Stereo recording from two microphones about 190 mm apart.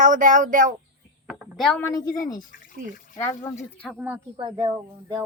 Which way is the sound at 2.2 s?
45° left (ahead or behind).